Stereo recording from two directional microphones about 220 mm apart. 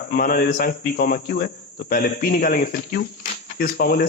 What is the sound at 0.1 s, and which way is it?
A man's voice, 40° left (ahead or behind).